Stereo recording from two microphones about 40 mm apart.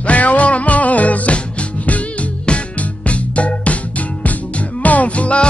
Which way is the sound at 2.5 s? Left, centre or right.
Left.